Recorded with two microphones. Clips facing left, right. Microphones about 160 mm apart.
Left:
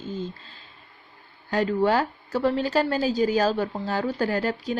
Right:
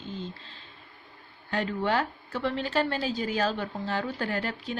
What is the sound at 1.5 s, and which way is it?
A woman's voice, 40° left (ahead or behind).